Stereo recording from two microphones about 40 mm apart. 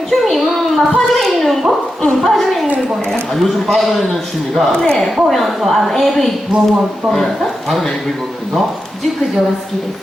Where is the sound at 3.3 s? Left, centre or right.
Centre.